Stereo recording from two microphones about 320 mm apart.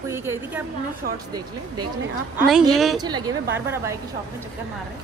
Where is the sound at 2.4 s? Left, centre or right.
Centre.